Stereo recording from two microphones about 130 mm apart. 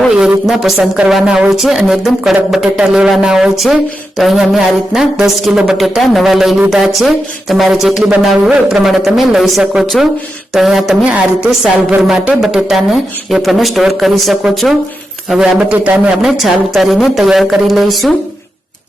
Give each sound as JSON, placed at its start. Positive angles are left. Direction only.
{"t": 0.1, "sound": "speech", "side_deg": -5}